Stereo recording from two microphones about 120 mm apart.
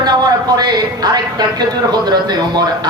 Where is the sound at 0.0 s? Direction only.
35° right (ahead or behind).